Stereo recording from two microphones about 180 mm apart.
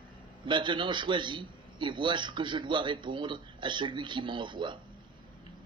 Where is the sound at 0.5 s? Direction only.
25° right (ahead or behind).